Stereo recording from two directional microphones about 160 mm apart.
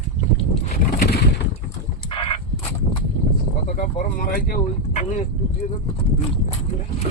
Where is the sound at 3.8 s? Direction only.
60° left (ahead or behind).